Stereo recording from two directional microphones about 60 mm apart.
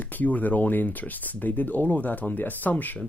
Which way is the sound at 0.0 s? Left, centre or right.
Left.